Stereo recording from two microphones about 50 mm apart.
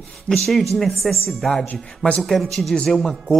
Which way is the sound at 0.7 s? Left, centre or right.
Centre.